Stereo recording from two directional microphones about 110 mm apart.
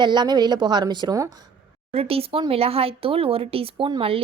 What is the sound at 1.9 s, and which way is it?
A woman's voice, 60° right (ahead or behind).